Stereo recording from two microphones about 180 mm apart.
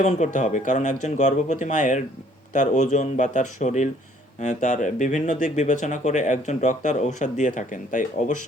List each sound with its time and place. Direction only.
0.0 s speech: 40° left (ahead or behind)